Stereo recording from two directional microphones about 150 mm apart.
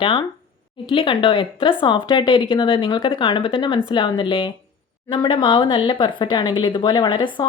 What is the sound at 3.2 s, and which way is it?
Speech, 35° left (ahead or behind).